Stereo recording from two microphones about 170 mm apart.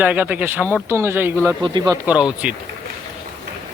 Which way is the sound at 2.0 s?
5° right (ahead or behind).